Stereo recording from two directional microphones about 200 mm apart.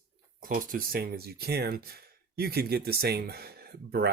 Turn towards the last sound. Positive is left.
turn(degrees=-50)  # may be behind; listen again after turning